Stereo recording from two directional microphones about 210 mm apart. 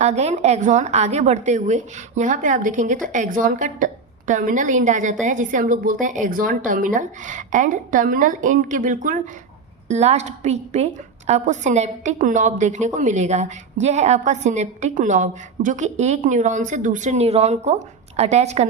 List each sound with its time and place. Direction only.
0.0 s a woman's voice: 30° right (ahead or behind)